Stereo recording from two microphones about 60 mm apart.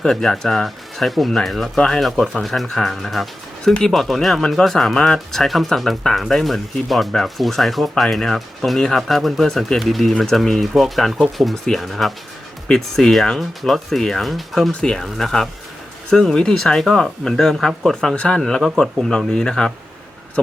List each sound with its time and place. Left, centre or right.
0.0 s speech: centre
12.6 s speech: centre
14.7 s speech: centre
14.9 s speech: centre
18.1 s speech: centre